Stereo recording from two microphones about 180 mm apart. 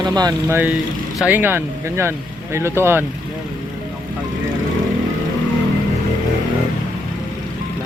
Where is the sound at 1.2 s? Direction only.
10° right (ahead or behind).